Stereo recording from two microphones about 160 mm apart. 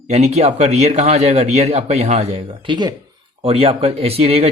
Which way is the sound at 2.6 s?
30° right (ahead or behind).